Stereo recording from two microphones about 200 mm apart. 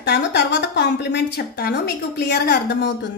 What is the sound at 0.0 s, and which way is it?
A woman's voice, 60° left (ahead or behind).